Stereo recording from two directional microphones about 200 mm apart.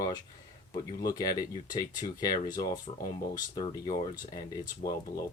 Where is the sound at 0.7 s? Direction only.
20° left (ahead or behind).